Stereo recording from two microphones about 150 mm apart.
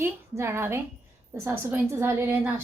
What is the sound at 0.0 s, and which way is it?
A woman's voice, 15° right (ahead or behind).